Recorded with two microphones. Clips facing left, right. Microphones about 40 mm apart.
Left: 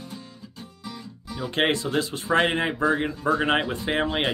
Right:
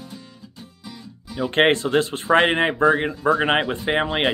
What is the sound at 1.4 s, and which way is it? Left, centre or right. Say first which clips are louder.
Speech: right 6 dB; right.